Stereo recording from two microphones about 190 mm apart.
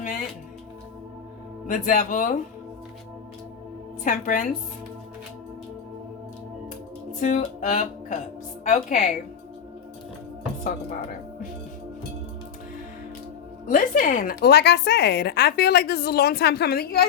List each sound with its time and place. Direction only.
0.0 s speech: 45° left (ahead or behind)
1.6 s speech: 45° left (ahead or behind)
4.0 s speech: 45° left (ahead or behind)
7.2 s speech: 40° left (ahead or behind)
13.7 s a woman's voice: 45° left (ahead or behind)